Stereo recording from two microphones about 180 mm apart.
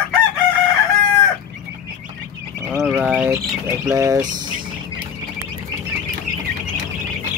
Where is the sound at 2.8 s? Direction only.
5° right (ahead or behind).